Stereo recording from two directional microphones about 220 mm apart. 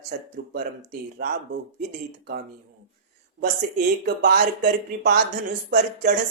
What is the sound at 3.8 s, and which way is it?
Speech, 45° right (ahead or behind).